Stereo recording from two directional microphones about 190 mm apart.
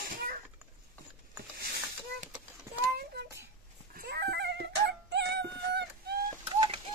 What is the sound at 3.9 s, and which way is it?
Music, 60° right (ahead or behind).